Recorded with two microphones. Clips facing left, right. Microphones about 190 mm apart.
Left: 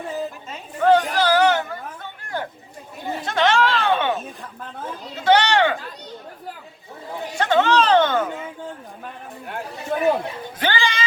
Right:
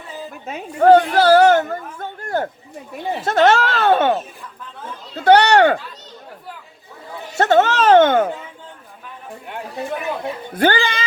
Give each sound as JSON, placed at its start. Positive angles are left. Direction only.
{"t": 0.4, "sound": "a woman's voice", "side_deg": -55}
{"t": 1.2, "sound": "a sound", "side_deg": -45}
{"t": 3.2, "sound": "speech", "side_deg": -45}
{"t": 5.2, "sound": "speech", "side_deg": -55}
{"t": 7.3, "sound": "a sound", "side_deg": -45}
{"t": 10.5, "sound": "speech", "side_deg": -50}